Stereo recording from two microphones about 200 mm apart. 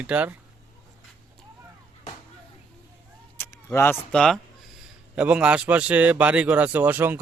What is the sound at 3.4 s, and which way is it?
A man's voice, 10° left (ahead or behind).